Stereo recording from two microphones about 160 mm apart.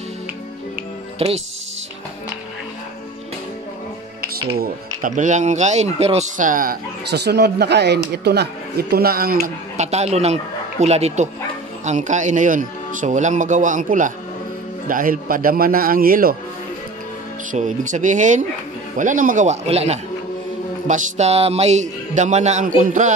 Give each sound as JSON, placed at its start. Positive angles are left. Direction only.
{"t": 1.2, "sound": "speech", "side_deg": -40}
{"t": 4.2, "sound": "speech", "side_deg": -65}
{"t": 9.8, "sound": "a man's voice", "side_deg": -45}
{"t": 17.5, "sound": "a man's voice", "side_deg": -50}